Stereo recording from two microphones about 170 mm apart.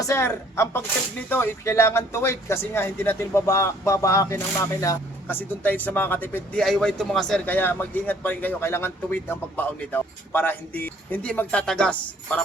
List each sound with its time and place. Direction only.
0.0 s speech: 15° left (ahead or behind)